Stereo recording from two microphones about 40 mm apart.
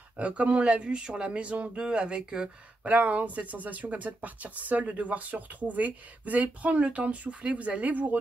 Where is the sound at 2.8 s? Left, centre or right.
Right.